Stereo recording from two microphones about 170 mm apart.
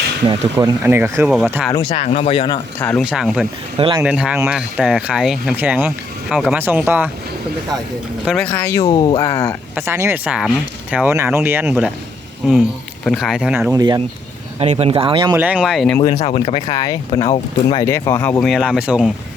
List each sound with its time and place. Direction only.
0.5 s speech: 15° right (ahead or behind)
1.9 s speech: 40° left (ahead or behind)
2.7 s speech: 10° left (ahead or behind)
3.0 s speech: 5° right (ahead or behind)
3.8 s speech: 30° right (ahead or behind)
4.0 s speech: 5° right (ahead or behind)
8.4 s speech: 15° left (ahead or behind)
9.7 s speech: 15° right (ahead or behind)
13.1 s speech: centre (ahead or behind)
13.7 s speech: 25° right (ahead or behind)
14.6 s speech: 35° right (ahead or behind)
15.4 s speech: 5° right (ahead or behind)
16.0 s speech: 40° left (ahead or behind); by 19.1 s 5° right (ahead or behind)